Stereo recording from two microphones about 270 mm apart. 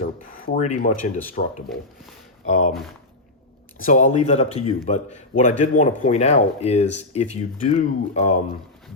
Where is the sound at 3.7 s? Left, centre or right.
Left.